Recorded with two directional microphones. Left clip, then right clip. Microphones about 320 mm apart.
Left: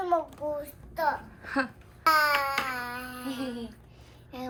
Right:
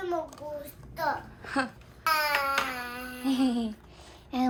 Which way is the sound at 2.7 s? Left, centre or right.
Centre.